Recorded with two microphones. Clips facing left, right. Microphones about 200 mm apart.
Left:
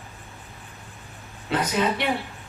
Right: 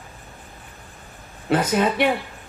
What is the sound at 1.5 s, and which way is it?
Speech, 50° right (ahead or behind).